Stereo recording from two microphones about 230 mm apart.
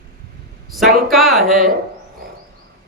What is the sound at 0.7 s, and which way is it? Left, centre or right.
Speech, centre.